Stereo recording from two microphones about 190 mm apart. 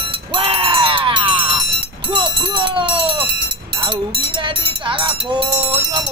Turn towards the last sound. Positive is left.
turn(degrees=-25)  # may be behind; listen again after turning